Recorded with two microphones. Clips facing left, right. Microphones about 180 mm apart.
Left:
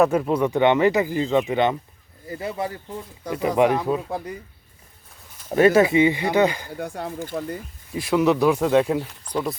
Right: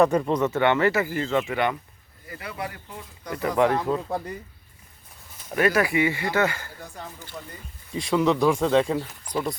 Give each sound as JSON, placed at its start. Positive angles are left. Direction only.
{"t": 0.0, "sound": "speech", "side_deg": 5}
{"t": 5.5, "sound": "speech", "side_deg": 30}
{"t": 6.7, "sound": "speech", "side_deg": 65}
{"t": 7.9, "sound": "speech", "side_deg": 5}